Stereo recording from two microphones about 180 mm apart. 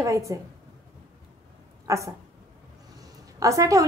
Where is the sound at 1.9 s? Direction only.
15° right (ahead or behind).